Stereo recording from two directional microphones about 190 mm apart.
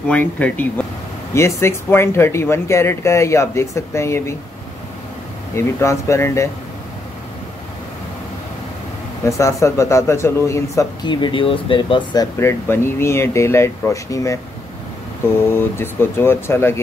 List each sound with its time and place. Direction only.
0.1 s a man's voice: 10° left (ahead or behind)
5.5 s a man's voice: 15° left (ahead or behind)
9.2 s a man's voice: 15° left (ahead or behind)
15.4 s a man's voice: 10° left (ahead or behind)